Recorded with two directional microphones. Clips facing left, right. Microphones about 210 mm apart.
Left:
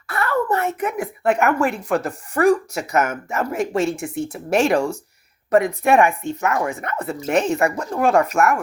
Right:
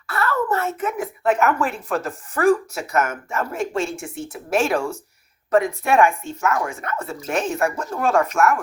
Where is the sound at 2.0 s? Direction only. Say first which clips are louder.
Left 2 dB; 65° left (ahead or behind).